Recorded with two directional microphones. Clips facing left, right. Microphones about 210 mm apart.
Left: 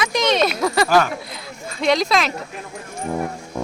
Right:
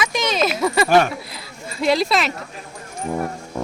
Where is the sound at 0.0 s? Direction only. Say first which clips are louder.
Left 2 dB; centre (ahead or behind).